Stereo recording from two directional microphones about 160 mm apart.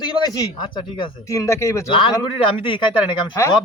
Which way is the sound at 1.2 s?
20° left (ahead or behind).